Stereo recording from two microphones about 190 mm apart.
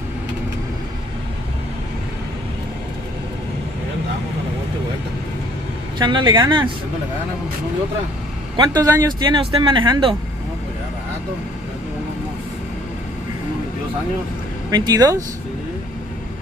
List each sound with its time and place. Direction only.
5.9 s speech: 25° right (ahead or behind)
8.5 s speech: 20° right (ahead or behind)
14.7 s speech: 20° right (ahead or behind)